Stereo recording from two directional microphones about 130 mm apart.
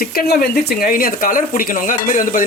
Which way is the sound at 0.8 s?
90° left.